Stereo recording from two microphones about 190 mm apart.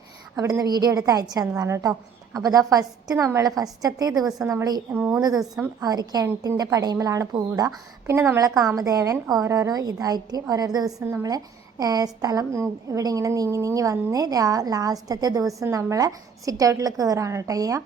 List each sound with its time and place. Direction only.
0.3 s a woman's voice: 20° right (ahead or behind)